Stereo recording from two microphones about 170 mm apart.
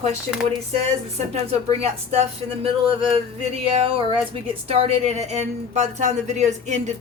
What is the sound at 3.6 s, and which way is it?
Speech, 30° right (ahead or behind).